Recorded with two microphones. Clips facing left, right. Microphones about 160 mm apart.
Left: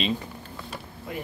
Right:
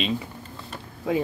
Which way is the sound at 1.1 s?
90° right.